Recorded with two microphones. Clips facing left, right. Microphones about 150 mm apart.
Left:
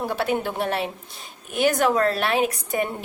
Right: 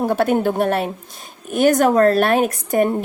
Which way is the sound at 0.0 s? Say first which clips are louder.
Right 7 dB; 50° right (ahead or behind).